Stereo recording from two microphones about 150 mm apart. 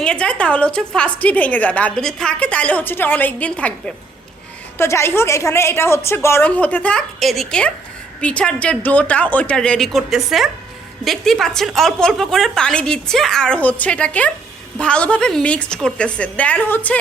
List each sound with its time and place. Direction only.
0.0 s a woman's voice: 5° left (ahead or behind)